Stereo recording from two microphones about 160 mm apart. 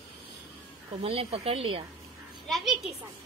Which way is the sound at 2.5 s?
Centre (ahead or behind).